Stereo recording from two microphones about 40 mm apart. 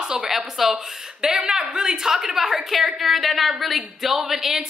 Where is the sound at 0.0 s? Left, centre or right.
Right.